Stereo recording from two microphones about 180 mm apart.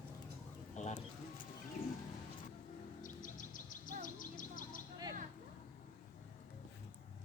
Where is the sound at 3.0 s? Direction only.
45° left (ahead or behind).